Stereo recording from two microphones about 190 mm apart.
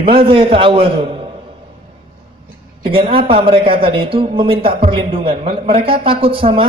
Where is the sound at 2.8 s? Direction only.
30° right (ahead or behind).